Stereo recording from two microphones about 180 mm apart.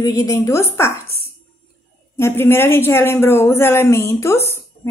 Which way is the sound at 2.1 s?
15° left (ahead or behind).